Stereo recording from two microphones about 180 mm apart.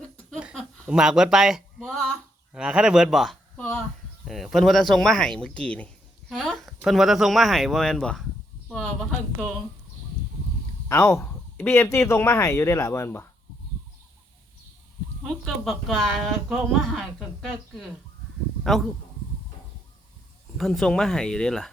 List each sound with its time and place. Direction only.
0.3 s a sound: centre (ahead or behind)
4.3 s speech: centre (ahead or behind)
10.8 s speech: 15° left (ahead or behind)
15.2 s speech: centre (ahead or behind)
20.6 s speech: centre (ahead or behind)